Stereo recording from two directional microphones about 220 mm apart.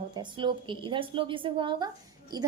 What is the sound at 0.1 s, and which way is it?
A woman's voice, 20° right (ahead or behind).